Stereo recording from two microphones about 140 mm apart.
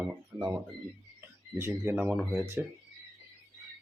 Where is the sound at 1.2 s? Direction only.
20° right (ahead or behind).